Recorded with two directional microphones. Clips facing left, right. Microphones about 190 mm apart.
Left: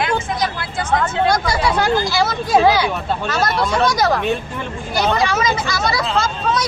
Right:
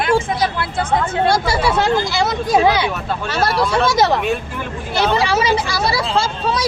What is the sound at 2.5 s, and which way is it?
Speech, centre (ahead or behind).